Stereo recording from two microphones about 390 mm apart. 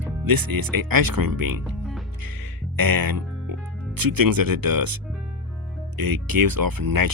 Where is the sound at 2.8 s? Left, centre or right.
Right.